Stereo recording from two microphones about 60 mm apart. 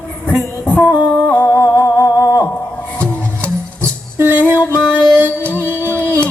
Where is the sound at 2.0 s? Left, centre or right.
Left.